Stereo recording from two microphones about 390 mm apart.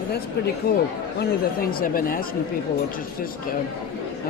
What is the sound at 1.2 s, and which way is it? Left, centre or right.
Speech, left.